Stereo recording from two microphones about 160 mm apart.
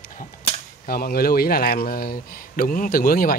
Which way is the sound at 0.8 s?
70° left (ahead or behind).